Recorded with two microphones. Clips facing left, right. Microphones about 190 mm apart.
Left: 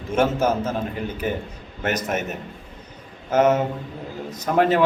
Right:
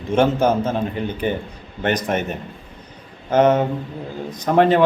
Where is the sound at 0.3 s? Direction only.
30° right (ahead or behind).